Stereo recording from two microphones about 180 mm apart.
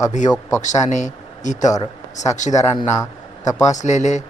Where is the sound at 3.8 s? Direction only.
40° left (ahead or behind).